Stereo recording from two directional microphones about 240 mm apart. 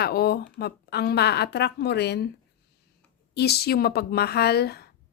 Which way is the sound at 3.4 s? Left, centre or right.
Left.